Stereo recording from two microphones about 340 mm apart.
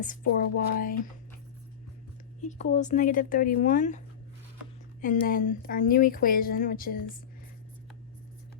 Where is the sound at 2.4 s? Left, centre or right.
Left.